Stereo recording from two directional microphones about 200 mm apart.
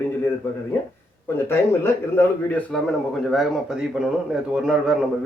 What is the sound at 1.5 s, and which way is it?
Speech, 10° left (ahead or behind).